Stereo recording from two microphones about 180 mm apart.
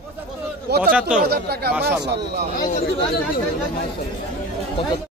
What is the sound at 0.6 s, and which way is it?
A man's voice, 60° right (ahead or behind).